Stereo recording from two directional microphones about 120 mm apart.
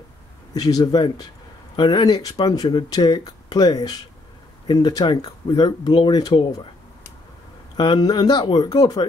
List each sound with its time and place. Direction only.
0.6 s speech: 30° left (ahead or behind)
7.7 s speech: 40° left (ahead or behind)